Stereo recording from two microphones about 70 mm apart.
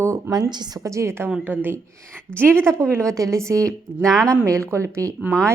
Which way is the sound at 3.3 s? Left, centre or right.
Right.